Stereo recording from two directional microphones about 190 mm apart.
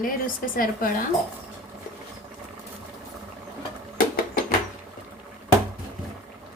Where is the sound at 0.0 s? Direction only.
50° left (ahead or behind).